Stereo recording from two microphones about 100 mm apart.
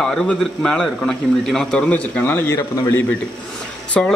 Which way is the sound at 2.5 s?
35° left (ahead or behind).